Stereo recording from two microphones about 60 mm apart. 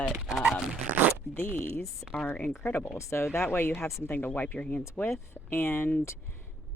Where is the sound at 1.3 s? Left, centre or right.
Left.